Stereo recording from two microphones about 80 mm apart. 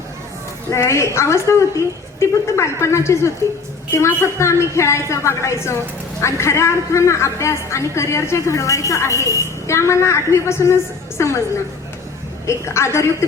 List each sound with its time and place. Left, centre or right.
0.8 s a woman's voice: left
12.5 s a woman's voice: left